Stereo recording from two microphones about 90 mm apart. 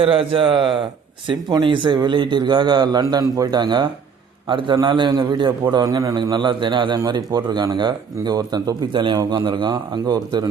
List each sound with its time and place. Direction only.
0.0 s a man's voice: 85° right
1.3 s a man's voice: 60° right (ahead or behind)
5.1 s speech: 50° right (ahead or behind)
6.3 s a man's voice: 60° right (ahead or behind)
7.3 s speech: 45° right (ahead or behind)